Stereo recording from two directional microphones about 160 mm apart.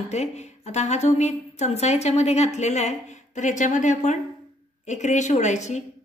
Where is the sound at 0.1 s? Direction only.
45° left (ahead or behind).